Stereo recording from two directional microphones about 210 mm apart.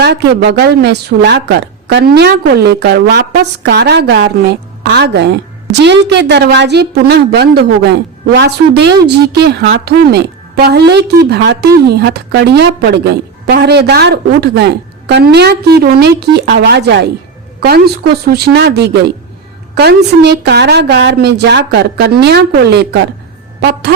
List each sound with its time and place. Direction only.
0.0 s a woman's voice: 50° right (ahead or behind)
18.3 s a woman's voice: 50° right (ahead or behind)